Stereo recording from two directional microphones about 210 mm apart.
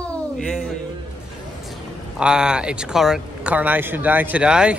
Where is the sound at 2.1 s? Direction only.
5° right (ahead or behind).